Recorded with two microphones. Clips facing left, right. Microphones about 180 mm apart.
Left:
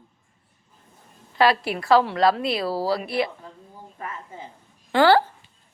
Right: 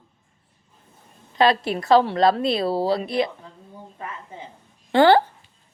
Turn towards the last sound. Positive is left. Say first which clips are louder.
# right 2 dB
turn(degrees=-20)  # may be behind; listen again after turning